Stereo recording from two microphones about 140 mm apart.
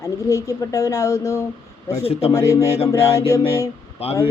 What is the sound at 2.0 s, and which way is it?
Speech, 45° left (ahead or behind).